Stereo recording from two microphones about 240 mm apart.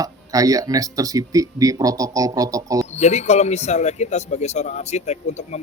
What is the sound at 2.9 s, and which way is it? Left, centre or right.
A man's voice, left.